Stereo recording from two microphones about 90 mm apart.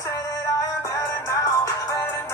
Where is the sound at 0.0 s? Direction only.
35° left (ahead or behind).